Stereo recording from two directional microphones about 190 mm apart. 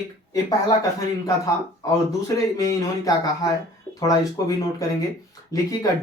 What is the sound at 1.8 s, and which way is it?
Speech, 20° left (ahead or behind).